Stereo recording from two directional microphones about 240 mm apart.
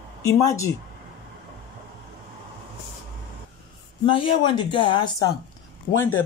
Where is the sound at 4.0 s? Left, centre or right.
Left.